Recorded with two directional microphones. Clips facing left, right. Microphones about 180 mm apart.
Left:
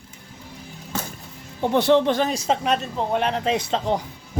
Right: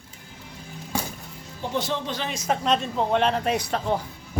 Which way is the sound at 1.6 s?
60° left (ahead or behind).